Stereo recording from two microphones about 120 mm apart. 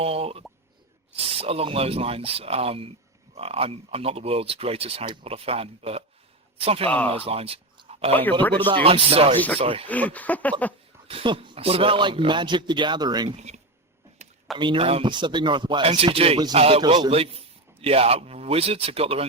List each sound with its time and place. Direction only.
0.0 s speech: 55° right (ahead or behind)
8.1 s speech: 15° left (ahead or behind)
8.6 s speech: 50° right (ahead or behind)
9.8 s speech: 10° left (ahead or behind)
11.1 s speech: 50° right (ahead or behind)
13.3 s speech: 70° right (ahead or behind)
14.5 s speech: 40° right (ahead or behind)
16.0 s a man's voice: 55° right (ahead or behind)